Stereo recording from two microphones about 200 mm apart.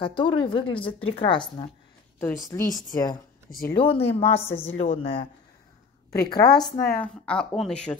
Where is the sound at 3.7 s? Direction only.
30° left (ahead or behind).